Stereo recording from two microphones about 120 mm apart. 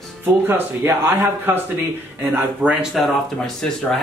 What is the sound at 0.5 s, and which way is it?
A man's voice, 15° right (ahead or behind).